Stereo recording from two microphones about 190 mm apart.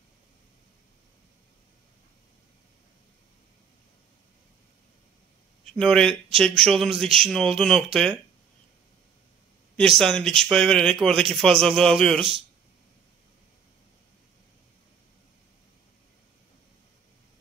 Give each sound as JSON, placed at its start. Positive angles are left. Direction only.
{"t": 5.7, "sound": "speech", "side_deg": 5}
{"t": 9.8, "sound": "speech", "side_deg": 0}